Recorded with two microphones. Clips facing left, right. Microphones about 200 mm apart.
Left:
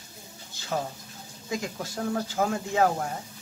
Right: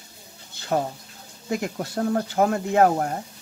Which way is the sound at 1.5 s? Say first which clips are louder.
Right 5 dB; 60° right (ahead or behind).